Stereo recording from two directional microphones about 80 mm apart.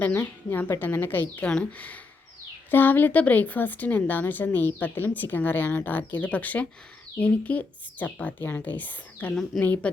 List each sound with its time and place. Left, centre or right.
0.5 s speech: left
1.5 s speech: centre
2.6 s speech: left